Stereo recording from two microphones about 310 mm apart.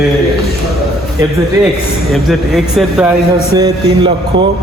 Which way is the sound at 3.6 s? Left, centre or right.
Centre.